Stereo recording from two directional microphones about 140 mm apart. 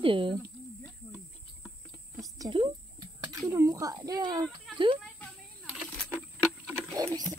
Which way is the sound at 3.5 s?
20° right (ahead or behind).